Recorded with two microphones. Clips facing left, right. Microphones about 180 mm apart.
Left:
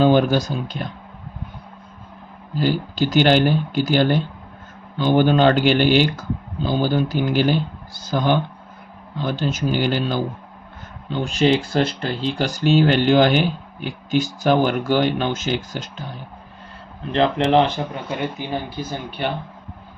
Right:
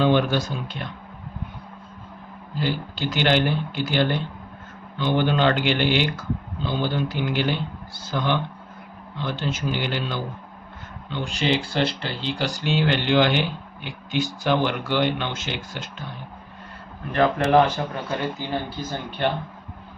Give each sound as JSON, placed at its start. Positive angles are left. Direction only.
{"t": 0.0, "sound": "speech", "side_deg": 40}
{"t": 2.6, "sound": "speech", "side_deg": 40}
{"t": 17.1, "sound": "speech", "side_deg": 20}